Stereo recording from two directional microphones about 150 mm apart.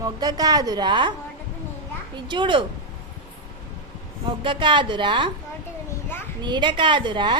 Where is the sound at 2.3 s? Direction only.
30° right (ahead or behind).